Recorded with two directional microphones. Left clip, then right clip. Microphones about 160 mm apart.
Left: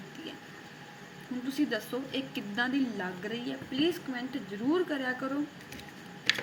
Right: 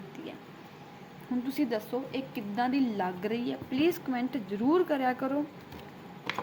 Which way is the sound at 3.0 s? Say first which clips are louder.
Right 4 dB; 25° right (ahead or behind).